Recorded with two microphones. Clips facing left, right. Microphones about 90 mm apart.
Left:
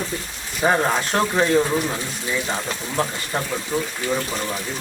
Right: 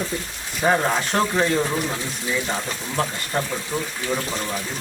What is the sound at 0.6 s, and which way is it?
Speech, 5° left (ahead or behind).